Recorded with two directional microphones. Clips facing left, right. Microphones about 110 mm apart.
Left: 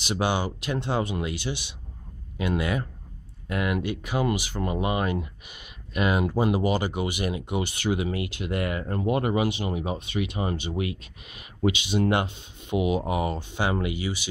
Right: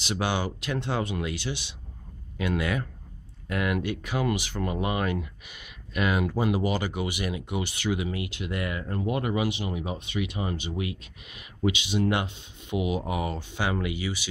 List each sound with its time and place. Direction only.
0.0 s speech: 20° left (ahead or behind)